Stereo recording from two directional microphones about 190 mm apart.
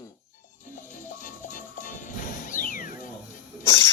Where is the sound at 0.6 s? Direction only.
45° left (ahead or behind).